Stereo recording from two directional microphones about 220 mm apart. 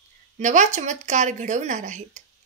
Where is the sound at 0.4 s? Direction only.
35° right (ahead or behind).